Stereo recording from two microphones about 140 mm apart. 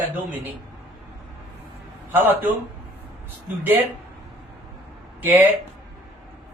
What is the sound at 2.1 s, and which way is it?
Speech, 15° right (ahead or behind).